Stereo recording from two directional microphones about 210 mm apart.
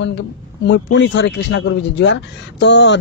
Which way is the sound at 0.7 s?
60° left (ahead or behind).